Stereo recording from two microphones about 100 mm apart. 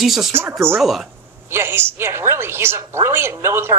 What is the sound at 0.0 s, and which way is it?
Speech, 5° right (ahead or behind).